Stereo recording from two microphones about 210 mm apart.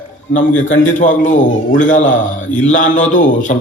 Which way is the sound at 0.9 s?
35° left (ahead or behind).